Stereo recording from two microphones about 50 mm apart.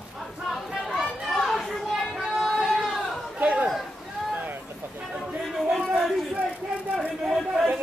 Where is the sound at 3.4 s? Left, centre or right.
Right.